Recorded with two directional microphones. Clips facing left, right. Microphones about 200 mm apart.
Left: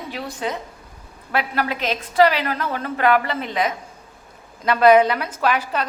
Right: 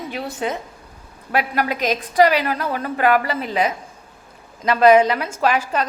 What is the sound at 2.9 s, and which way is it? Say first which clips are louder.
Speech: right 1 dB; 40° right (ahead or behind).